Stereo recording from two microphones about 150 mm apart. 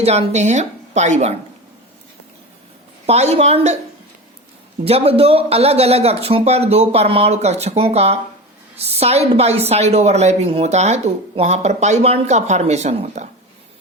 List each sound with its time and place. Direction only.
0.0 s a woman's voice: 45° right (ahead or behind)
3.1 s a woman's voice: 45° right (ahead or behind)
4.9 s a woman's voice: 40° right (ahead or behind)